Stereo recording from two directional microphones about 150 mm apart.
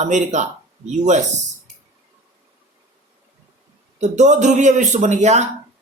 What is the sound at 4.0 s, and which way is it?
A man's voice, 50° right (ahead or behind).